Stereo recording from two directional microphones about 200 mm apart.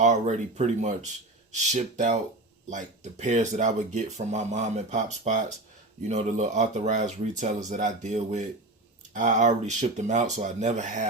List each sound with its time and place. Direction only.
0.0 s speech: 35° right (ahead or behind)